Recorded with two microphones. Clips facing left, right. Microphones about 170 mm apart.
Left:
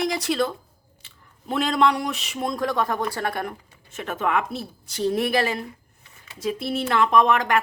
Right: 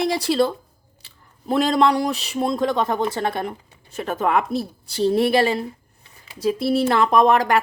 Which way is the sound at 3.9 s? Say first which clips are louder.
Right 4 dB; 35° right (ahead or behind).